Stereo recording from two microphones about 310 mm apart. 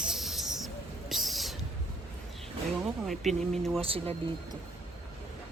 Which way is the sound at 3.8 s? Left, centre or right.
Centre.